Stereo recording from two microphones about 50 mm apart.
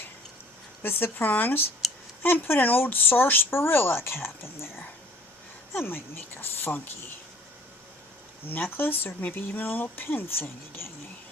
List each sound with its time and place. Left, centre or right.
0.8 s speech: left
5.8 s speech: left
8.4 s speech: left